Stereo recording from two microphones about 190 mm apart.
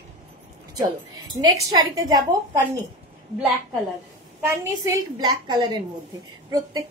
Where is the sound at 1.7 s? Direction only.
20° right (ahead or behind).